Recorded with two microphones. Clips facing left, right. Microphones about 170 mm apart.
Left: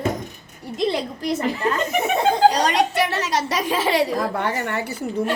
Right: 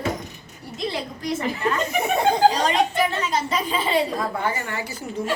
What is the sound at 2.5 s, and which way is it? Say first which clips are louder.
A woman's voice: left 1 dB; 70° left (ahead or behind).